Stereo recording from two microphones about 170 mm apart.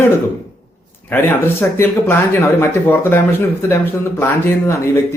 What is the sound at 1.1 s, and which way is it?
Speech, 15° left (ahead or behind).